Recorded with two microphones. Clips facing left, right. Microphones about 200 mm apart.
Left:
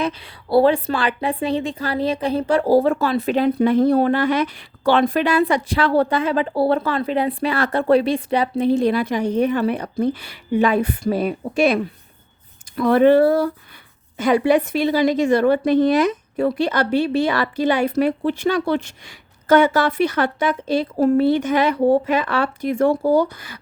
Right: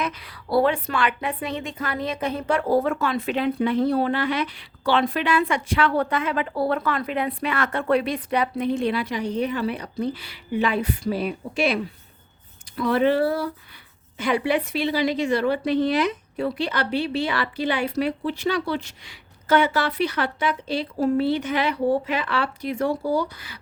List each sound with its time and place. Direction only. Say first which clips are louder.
0.0 s a woman's voice: left 5 dB; 30° left (ahead or behind); by 23.6 s 50° left (ahead or behind)